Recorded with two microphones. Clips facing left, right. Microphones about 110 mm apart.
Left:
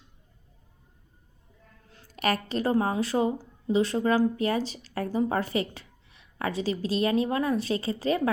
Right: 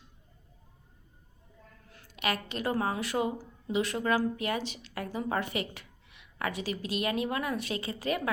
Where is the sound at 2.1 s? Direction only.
40° left (ahead or behind).